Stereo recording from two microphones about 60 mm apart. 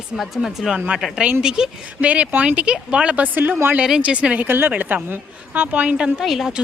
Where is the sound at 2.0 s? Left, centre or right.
Right.